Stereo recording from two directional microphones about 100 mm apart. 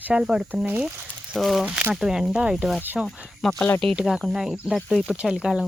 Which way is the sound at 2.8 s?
20° right (ahead or behind).